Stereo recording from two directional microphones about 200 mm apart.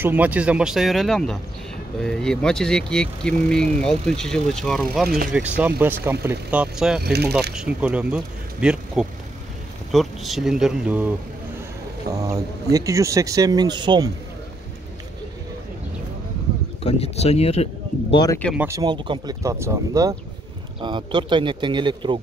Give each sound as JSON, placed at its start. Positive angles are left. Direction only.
{"t": 0.0, "sound": "speech", "side_deg": -10}
{"t": 7.0, "sound": "speech", "side_deg": -55}
{"t": 7.5, "sound": "speech", "side_deg": -5}
{"t": 12.1, "sound": "speech", "side_deg": -50}
{"t": 12.7, "sound": "speech", "side_deg": -15}
{"t": 16.8, "sound": "speech", "side_deg": 30}
{"t": 18.1, "sound": "speech", "side_deg": 20}
{"t": 18.4, "sound": "speech", "side_deg": 0}
{"t": 18.7, "sound": "speech", "side_deg": -20}